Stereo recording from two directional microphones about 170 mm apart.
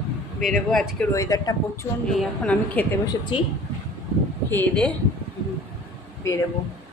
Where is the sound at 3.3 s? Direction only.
30° left (ahead or behind).